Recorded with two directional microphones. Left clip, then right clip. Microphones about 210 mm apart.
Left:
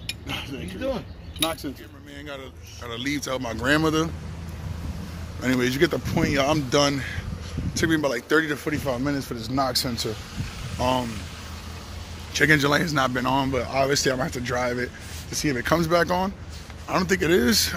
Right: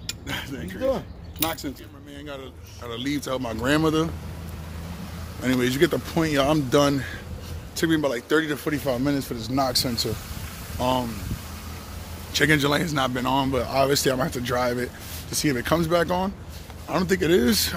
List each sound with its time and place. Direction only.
2.9 s speech: 20° right (ahead or behind)
5.4 s speech: 10° right (ahead or behind)
6.1 s speech: 30° right (ahead or behind)
7.7 s speech: 15° right (ahead or behind)
8.6 s speech: 20° right (ahead or behind)
12.4 s speech: centre (ahead or behind)
13.5 s speech: 20° right (ahead or behind)